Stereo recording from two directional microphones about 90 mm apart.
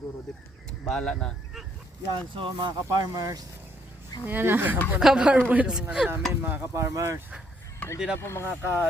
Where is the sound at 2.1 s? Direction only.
65° right (ahead or behind); by 3.4 s 40° right (ahead or behind).